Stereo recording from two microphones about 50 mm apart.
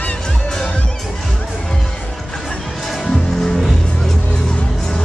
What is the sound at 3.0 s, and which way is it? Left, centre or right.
Music, centre.